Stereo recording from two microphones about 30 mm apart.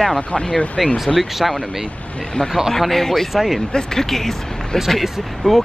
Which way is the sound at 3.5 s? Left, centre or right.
Centre.